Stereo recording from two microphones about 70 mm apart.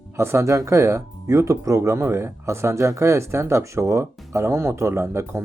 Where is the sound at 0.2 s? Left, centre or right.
Right.